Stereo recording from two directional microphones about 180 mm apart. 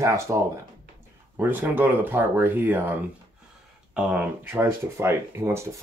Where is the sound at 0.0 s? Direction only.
15° right (ahead or behind).